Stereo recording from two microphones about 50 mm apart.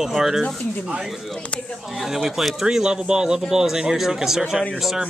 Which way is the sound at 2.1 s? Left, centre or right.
Centre.